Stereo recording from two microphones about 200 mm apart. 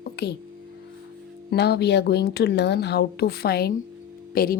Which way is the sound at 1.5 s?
55° left (ahead or behind).